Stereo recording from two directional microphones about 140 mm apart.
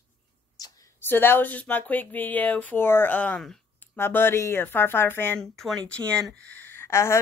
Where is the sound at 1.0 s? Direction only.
15° left (ahead or behind).